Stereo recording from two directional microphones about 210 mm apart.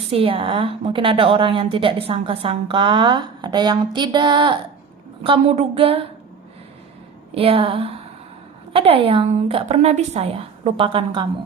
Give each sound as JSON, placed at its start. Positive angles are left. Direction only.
{"t": 0.1, "sound": "a woman's voice", "side_deg": -25}
{"t": 7.3, "sound": "a woman's voice", "side_deg": -25}